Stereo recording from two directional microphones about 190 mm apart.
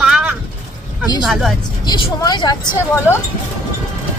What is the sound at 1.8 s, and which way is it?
Speech, 20° left (ahead or behind).